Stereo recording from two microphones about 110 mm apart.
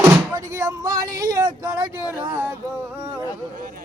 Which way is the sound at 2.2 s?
20° right (ahead or behind).